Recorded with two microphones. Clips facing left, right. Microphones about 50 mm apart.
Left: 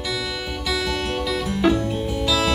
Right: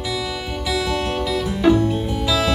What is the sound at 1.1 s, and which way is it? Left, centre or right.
Music, centre.